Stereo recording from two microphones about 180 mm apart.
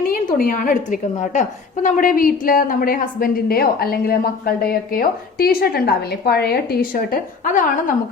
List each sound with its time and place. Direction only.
0.1 s a woman's voice: 50° left (ahead or behind)